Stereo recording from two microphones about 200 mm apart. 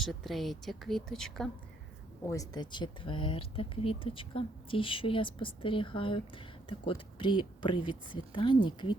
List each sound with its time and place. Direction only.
0.0 s speech: centre (ahead or behind)
2.2 s speech: 15° left (ahead or behind)